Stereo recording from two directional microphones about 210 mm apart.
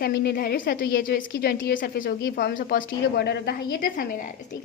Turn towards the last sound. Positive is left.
turn(degrees=45)  # may be behind; listen again after turning